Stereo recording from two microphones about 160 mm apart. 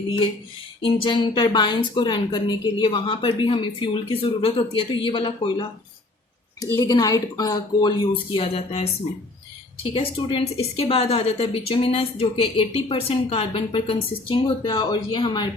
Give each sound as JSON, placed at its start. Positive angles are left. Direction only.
{"t": 0.8, "sound": "a woman's voice", "side_deg": 30}
{"t": 9.9, "sound": "a woman's voice", "side_deg": 35}